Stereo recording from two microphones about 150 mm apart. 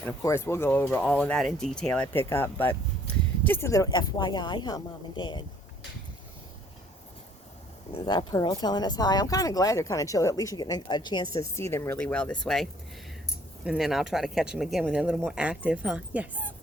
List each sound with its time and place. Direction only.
0.0 s speech: 20° left (ahead or behind)
7.9 s speech: 30° left (ahead or behind); by 12.6 s 5° left (ahead or behind)
13.7 s speech: centre (ahead or behind)